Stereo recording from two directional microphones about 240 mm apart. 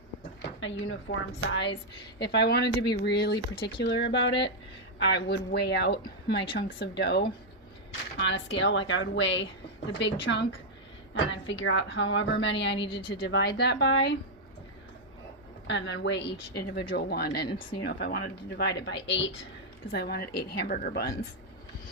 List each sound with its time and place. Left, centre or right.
0.4 s a woman's voice: left
3.3 s speech: left
3.8 s a woman's voice: left
12.9 s speech: left
13.2 s a woman's voice: left
15.6 s a woman's voice: left